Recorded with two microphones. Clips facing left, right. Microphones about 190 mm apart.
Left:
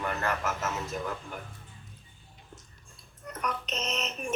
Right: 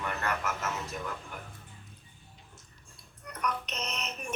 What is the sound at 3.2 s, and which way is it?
Music, 25° left (ahead or behind).